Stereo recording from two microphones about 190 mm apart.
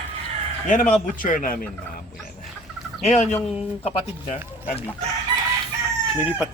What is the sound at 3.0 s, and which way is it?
Chicken, 35° left (ahead or behind).